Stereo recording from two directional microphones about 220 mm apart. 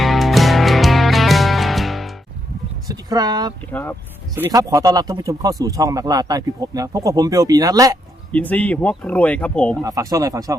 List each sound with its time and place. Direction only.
0.0 s music: centre (ahead or behind)
2.9 s speech: 15° right (ahead or behind)
3.7 s speech: 10° left (ahead or behind)
4.4 s speech: 15° right (ahead or behind)
8.3 s speech: 5° left (ahead or behind)
9.8 s speech: 15° right (ahead or behind)